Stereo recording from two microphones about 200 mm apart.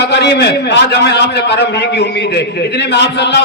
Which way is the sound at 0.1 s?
55° left (ahead or behind).